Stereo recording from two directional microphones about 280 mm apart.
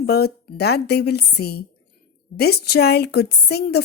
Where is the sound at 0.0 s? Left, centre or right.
Left.